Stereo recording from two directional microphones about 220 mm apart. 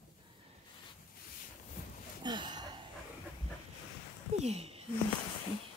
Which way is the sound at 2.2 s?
20° right (ahead or behind).